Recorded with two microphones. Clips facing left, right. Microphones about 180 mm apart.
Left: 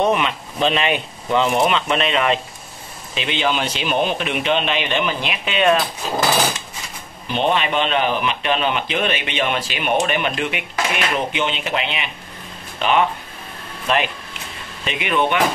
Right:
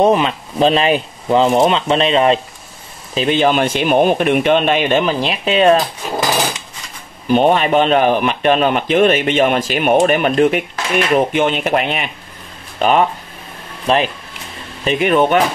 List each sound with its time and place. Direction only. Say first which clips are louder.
0.0 s speech: right 6 dB; 35° right (ahead or behind)
3.2 s a man's voice: right 8 dB; 45° right (ahead or behind)
7.2 s a man's voice: right 7 dB; 45° right (ahead or behind)